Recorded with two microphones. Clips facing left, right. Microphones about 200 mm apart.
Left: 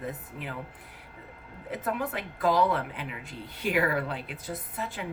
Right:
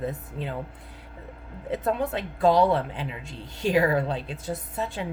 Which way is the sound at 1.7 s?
25° right (ahead or behind).